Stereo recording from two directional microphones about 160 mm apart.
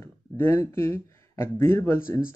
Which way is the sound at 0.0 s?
15° left (ahead or behind).